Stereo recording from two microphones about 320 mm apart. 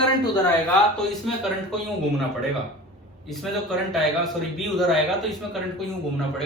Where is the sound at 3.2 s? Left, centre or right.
Centre.